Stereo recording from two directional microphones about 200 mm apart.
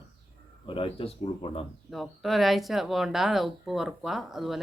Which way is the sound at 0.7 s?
25° left (ahead or behind).